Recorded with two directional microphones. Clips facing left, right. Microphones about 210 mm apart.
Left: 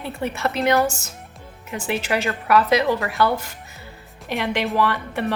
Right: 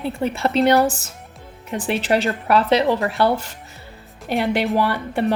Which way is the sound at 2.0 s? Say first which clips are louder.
Right 4 dB; 30° right (ahead or behind).